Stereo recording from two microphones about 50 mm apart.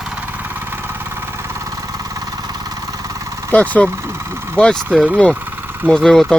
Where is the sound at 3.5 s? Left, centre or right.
Left.